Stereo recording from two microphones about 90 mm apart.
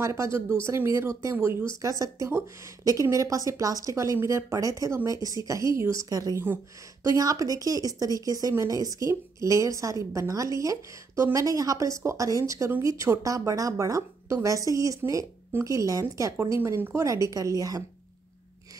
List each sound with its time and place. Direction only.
0.0 s speech: 30° right (ahead or behind)